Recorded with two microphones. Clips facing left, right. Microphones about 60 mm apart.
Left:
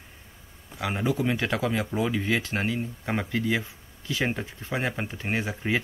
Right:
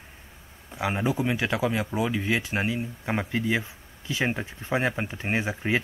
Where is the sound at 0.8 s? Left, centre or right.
Centre.